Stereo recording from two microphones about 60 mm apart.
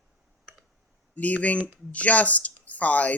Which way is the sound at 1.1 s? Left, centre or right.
Left.